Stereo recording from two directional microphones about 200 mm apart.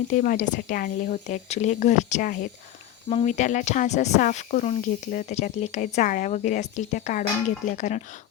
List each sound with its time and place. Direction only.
0.1 s speech: 40° left (ahead or behind)